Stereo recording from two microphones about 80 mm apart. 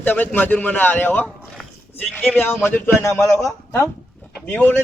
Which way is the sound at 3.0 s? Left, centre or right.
Left.